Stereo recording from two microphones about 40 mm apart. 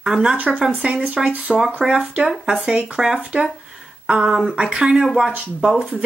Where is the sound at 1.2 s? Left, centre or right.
Centre.